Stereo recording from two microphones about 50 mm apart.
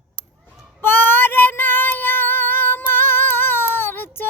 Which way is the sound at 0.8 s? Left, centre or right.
Left.